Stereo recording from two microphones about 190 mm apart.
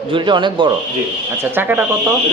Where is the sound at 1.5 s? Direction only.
10° right (ahead or behind).